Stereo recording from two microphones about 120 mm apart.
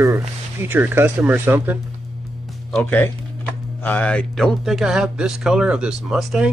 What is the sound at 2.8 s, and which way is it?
Speech, 15° left (ahead or behind).